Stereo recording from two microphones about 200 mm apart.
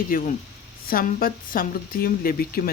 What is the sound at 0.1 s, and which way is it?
Speech, 45° left (ahead or behind).